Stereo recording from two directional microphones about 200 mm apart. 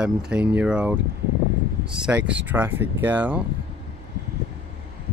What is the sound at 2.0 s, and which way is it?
Speech, 5° right (ahead or behind).